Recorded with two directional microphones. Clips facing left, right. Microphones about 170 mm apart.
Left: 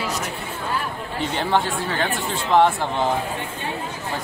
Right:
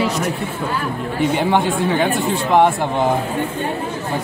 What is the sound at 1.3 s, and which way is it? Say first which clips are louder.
Speech: right 2 dB; 15° right (ahead or behind).